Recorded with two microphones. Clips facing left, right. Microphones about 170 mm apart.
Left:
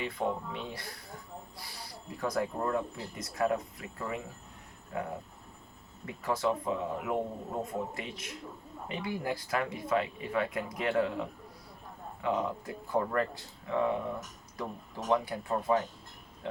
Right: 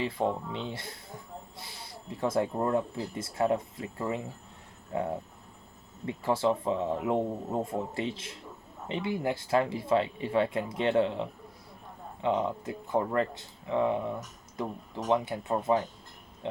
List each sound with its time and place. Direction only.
0.2 s speech: 25° right (ahead or behind)